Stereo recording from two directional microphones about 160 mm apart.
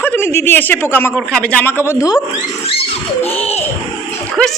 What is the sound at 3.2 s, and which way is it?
Baby laughter, 40° left (ahead or behind).